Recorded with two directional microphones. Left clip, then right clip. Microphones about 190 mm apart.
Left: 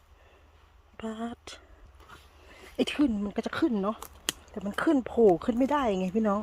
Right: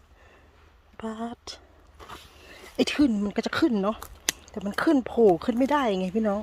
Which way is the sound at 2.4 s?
25° right (ahead or behind).